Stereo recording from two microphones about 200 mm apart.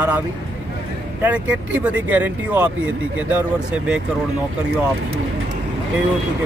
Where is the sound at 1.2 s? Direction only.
5° right (ahead or behind).